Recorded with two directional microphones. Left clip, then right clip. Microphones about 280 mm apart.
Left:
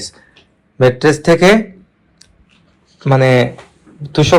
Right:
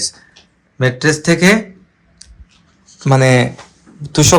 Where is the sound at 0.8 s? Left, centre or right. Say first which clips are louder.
Left 4 dB; centre.